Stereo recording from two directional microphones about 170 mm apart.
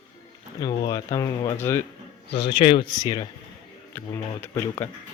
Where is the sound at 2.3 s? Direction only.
85° left.